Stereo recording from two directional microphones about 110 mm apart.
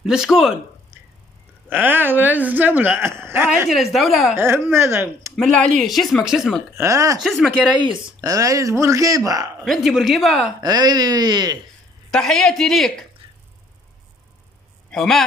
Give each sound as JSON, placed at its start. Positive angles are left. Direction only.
{"t": 0.0, "sound": "speech", "side_deg": -5}
{"t": 1.7, "sound": "speech", "side_deg": -20}
{"t": 3.6, "sound": "speech", "side_deg": 0}
{"t": 4.4, "sound": "speech", "side_deg": -20}
{"t": 5.3, "sound": "speech", "side_deg": 5}
{"t": 6.8, "sound": "speech", "side_deg": -30}
{"t": 7.2, "sound": "speech", "side_deg": 0}
{"t": 8.2, "sound": "speech", "side_deg": -30}
{"t": 9.7, "sound": "speech", "side_deg": 0}
{"t": 10.6, "sound": "speech", "side_deg": -35}
{"t": 12.1, "sound": "speech", "side_deg": 5}
{"t": 14.9, "sound": "a man's voice", "side_deg": 5}